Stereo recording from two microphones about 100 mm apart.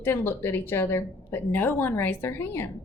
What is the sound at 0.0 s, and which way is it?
Speech, 25° left (ahead or behind).